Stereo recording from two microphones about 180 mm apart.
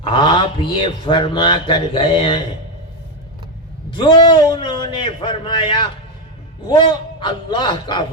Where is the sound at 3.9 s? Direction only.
25° left (ahead or behind).